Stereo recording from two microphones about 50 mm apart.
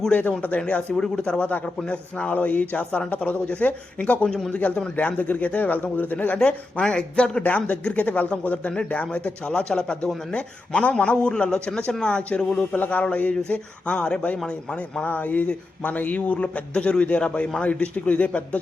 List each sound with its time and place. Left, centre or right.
0.1 s a man's voice: left
4.3 s a man's voice: centre
4.5 s speech: left
6.4 s speech: centre
11.2 s a man's voice: centre
12.7 s speech: left
15.0 s speech: left